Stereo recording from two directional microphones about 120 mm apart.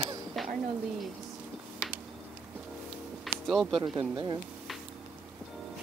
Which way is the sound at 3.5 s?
Centre (ahead or behind).